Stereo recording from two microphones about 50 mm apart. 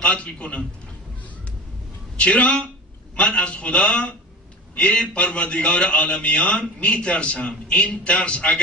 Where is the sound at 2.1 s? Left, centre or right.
Left.